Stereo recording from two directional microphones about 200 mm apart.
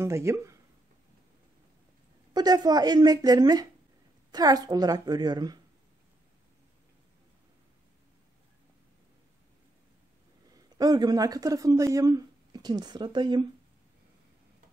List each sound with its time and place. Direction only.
0.0 s speech: 15° right (ahead or behind)
2.3 s a woman's voice: 20° right (ahead or behind)
10.5 s speech: 20° right (ahead or behind)